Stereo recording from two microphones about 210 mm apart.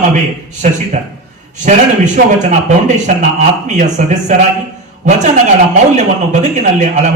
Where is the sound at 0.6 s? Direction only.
35° right (ahead or behind).